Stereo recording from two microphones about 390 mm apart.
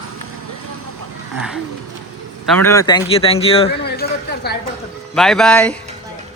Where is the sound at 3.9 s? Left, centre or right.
Left.